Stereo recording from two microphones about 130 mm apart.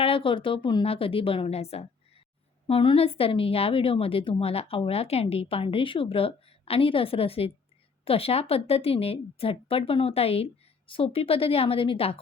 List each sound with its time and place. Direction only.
0.0 s a woman's voice: 45° left (ahead or behind)